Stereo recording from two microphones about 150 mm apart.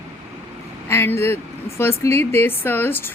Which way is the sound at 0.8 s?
15° left (ahead or behind).